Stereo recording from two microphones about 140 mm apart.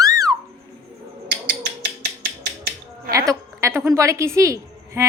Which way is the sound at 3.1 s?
25° right (ahead or behind).